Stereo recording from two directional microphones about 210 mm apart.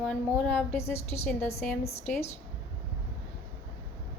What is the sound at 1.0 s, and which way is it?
Speech, 30° left (ahead or behind).